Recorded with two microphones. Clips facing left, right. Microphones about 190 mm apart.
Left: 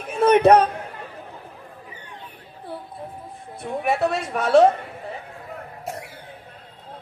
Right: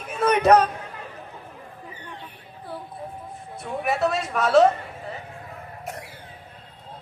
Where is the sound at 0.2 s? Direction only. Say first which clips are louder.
Left 3 dB; 30° left (ahead or behind).